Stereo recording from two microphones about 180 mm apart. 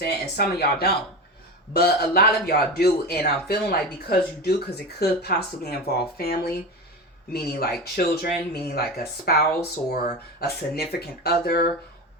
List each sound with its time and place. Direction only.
0.0 s speech: 60° left (ahead or behind)